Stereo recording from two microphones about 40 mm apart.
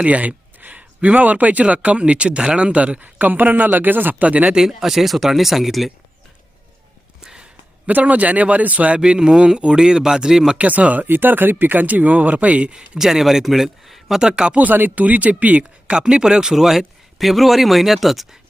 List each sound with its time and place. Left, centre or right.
0.0 s speech: right
3.0 s speech: right
4.1 s speech: right
4.5 s speech: centre
7.9 s speech: right
9.0 s speech: centre
10.6 s speech: right
11.0 s speech: right
13.0 s speech: centre
14.2 s speech: centre
14.5 s speech: right
15.9 s speech: right; by 18.3 s centre